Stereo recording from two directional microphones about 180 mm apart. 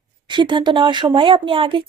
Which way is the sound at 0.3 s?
25° right (ahead or behind).